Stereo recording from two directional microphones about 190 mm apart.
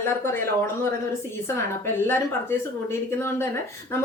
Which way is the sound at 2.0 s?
10° left (ahead or behind).